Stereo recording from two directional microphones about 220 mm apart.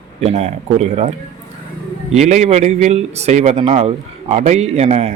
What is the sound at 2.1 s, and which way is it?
Speech, 30° right (ahead or behind).